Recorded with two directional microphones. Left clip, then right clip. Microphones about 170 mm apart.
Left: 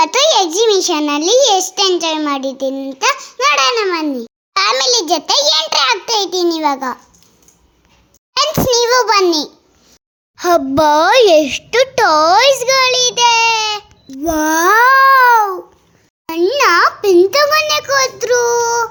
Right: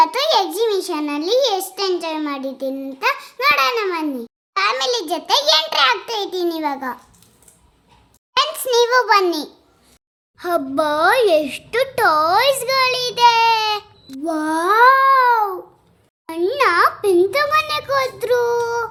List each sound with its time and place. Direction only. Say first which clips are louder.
0.0 s a child's voice: left 4 dB; 40° left (ahead or behind)
8.4 s a child's voice: left 6 dB; 25° left (ahead or behind)
10.3 s a child's voice: left 7 dB; 40° left (ahead or behind); by 13.8 s 20° left (ahead or behind)
14.3 s babbling: left 6 dB; 25° left (ahead or behind)
16.2 s a child's voice: left 5 dB; 20° left (ahead or behind)